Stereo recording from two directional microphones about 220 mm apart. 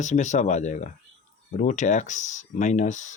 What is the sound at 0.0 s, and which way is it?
Speech, 35° left (ahead or behind).